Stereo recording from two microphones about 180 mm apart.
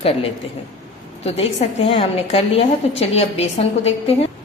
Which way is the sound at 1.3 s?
35° left (ahead or behind).